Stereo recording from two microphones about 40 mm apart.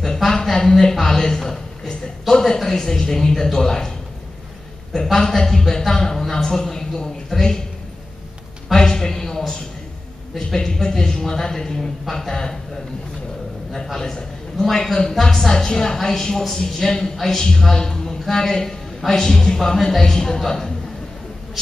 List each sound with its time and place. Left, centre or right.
0.3 s a woman's voice: centre
5.0 s speech: centre
7.3 s a man's voice: centre
8.7 s a sound: centre
10.3 s speech: centre
13.9 s a woman's voice: centre